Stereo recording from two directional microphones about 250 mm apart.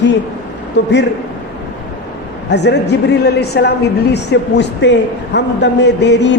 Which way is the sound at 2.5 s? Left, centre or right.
Left.